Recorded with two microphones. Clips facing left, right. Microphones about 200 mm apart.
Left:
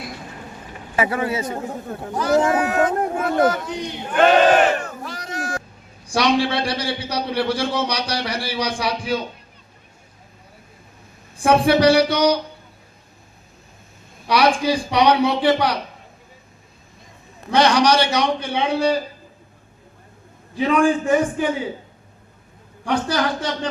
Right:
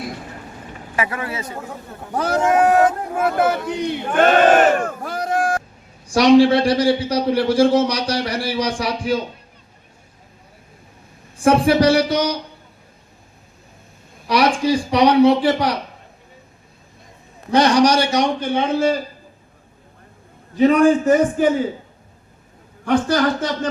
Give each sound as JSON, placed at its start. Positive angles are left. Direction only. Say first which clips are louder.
{"t": 0.9, "sound": "speech", "louder": "left 4 dB", "side_deg": 30}
{"t": 2.1, "sound": "a man's voice", "louder": "right 1 dB", "side_deg": -50}
{"t": 3.8, "sound": "battle cry", "louder": "right 2 dB", "side_deg": -55}
{"t": 6.1, "sound": "a man's voice", "louder": "right 8 dB", "side_deg": -40}
{"t": 11.3, "sound": "a man's voice", "louder": "right 1 dB", "side_deg": -45}
{"t": 14.3, "sound": "a man's voice", "louder": "right 1 dB", "side_deg": -45}
{"t": 17.5, "sound": "a man's voice", "louder": "right 2 dB", "side_deg": -45}
{"t": 20.6, "sound": "a man's voice", "louder": "right 5 dB", "side_deg": -45}
{"t": 22.9, "sound": "a man's voice", "louder": "right 4 dB", "side_deg": -45}